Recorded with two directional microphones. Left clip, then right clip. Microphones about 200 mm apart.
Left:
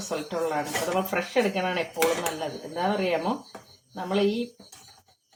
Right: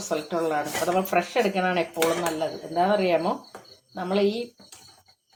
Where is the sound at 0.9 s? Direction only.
40° right (ahead or behind).